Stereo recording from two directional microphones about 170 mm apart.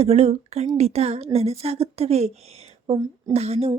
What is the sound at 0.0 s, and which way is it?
A woman's voice, 40° right (ahead or behind).